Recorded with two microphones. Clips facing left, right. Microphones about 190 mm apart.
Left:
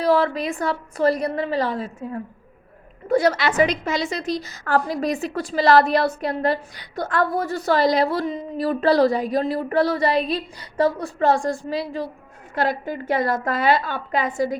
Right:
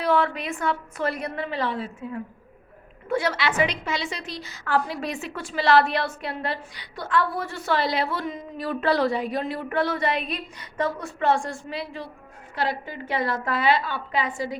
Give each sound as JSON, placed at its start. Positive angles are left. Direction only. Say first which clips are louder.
{"t": 0.0, "sound": "a woman's voice", "louder": "left 4 dB", "side_deg": 35}